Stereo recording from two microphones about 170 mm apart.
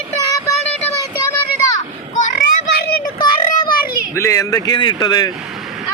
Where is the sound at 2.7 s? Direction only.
65° left (ahead or behind).